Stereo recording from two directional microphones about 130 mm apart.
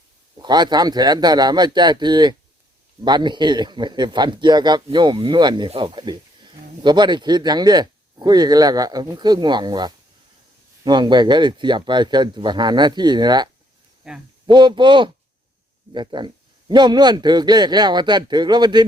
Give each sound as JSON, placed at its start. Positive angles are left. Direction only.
{"t": 0.3, "sound": "speech", "side_deg": -35}
{"t": 14.0, "sound": "speech", "side_deg": -5}
{"t": 14.4, "sound": "speech", "side_deg": -35}